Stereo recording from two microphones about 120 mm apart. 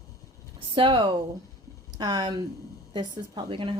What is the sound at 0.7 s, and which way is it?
A woman's voice, 45° right (ahead or behind).